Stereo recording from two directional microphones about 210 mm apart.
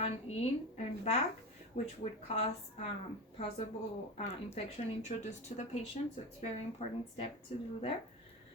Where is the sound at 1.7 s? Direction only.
30° left (ahead or behind).